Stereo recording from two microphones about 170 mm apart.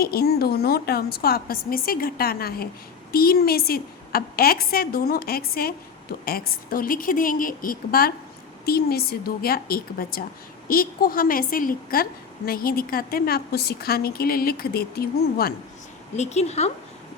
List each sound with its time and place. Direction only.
0.0 s a woman's voice: 65° left (ahead or behind)
16.1 s speech: 40° left (ahead or behind)